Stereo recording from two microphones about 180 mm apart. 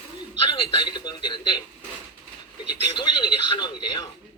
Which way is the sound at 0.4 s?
30° left (ahead or behind).